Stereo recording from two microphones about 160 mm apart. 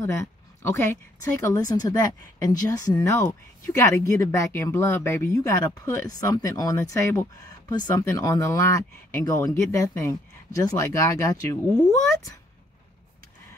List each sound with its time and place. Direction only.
0.0 s speech: 15° left (ahead or behind)